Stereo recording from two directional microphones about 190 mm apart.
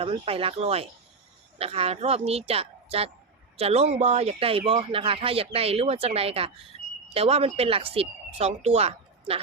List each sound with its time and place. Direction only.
0.0 s speech: 30° right (ahead or behind)